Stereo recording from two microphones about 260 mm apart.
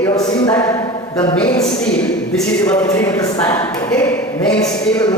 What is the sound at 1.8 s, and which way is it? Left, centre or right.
Speech, centre.